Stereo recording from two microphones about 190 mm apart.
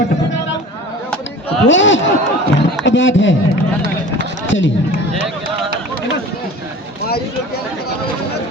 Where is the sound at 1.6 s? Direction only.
75° left (ahead or behind).